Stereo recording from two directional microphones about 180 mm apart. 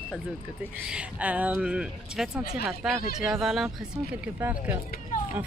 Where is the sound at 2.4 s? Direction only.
55° left (ahead or behind).